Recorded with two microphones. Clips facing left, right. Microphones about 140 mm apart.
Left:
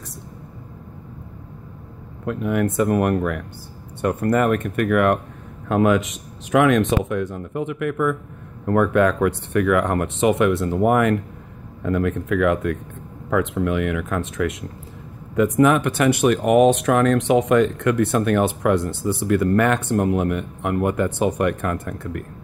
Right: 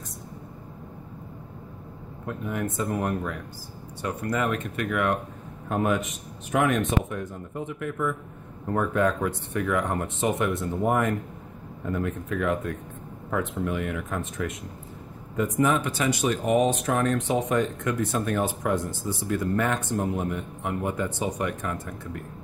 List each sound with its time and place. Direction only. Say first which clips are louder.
2.2 s speech: left 9 dB; 90° left; by 3.4 s 70° left (ahead or behind)
4.0 s speech: left 8 dB; 55° left (ahead or behind)
5.7 s speech: left 7 dB; 90° left; by 8.2 s 75° left (ahead or behind)
8.6 s speech: left 7 dB; 85° left
15.3 s speech: left 7 dB; 70° left (ahead or behind)